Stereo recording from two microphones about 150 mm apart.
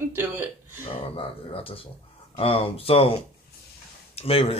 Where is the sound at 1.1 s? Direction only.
40° left (ahead or behind).